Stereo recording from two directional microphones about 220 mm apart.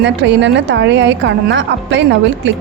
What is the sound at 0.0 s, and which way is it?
A woman's voice, 50° right (ahead or behind).